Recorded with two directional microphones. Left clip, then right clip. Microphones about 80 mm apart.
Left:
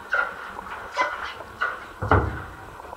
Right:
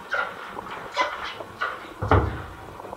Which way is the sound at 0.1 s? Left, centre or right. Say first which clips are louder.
Left 3 dB; centre.